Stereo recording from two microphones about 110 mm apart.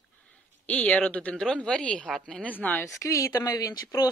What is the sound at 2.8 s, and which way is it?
Speech, 30° left (ahead or behind).